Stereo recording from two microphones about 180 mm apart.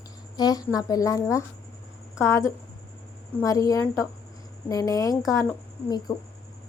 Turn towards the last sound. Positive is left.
turn(degrees=20)  # may be behind; listen again after turning